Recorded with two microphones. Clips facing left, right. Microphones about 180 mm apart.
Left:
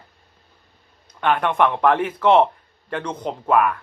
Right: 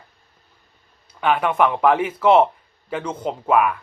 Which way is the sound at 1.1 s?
5° right (ahead or behind).